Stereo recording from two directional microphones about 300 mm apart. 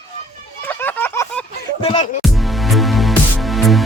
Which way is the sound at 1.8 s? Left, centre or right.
Centre.